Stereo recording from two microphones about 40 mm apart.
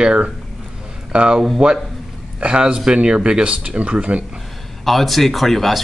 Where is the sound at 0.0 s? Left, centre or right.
Right.